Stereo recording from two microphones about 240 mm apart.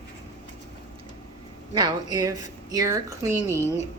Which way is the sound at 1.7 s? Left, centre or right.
Centre.